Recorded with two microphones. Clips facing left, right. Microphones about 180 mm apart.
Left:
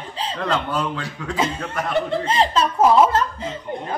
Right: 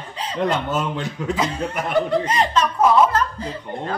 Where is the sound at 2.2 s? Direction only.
30° left (ahead or behind).